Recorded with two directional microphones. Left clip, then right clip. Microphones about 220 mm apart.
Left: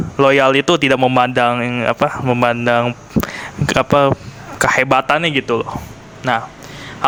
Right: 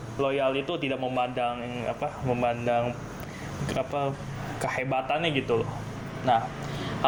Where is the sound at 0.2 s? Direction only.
40° left (ahead or behind).